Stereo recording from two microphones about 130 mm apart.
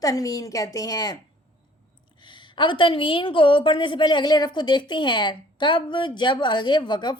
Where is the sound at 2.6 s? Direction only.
40° left (ahead or behind).